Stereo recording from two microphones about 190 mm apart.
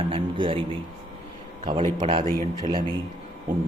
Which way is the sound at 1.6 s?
25° right (ahead or behind).